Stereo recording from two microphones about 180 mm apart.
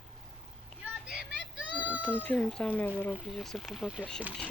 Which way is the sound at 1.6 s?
5° right (ahead or behind).